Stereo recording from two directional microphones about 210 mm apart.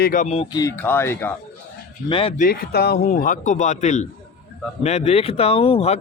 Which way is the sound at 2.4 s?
45° left (ahead or behind).